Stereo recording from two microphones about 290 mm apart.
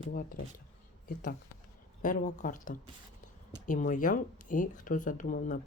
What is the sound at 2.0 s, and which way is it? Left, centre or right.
Speech, left.